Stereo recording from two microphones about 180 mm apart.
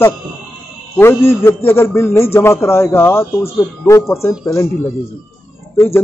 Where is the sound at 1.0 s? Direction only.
15° left (ahead or behind).